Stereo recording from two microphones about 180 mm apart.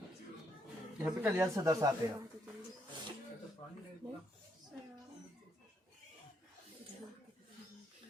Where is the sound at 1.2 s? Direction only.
15° right (ahead or behind).